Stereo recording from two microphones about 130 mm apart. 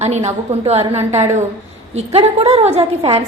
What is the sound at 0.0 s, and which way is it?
A woman's voice, 60° right (ahead or behind).